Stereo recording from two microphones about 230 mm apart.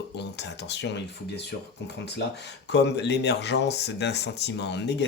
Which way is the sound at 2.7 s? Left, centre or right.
Left.